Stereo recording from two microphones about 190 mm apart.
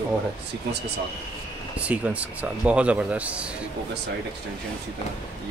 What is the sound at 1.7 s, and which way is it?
Speech, 5° right (ahead or behind).